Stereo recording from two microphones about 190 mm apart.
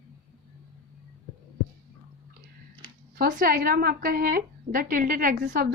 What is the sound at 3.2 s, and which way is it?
A woman's voice, 45° right (ahead or behind).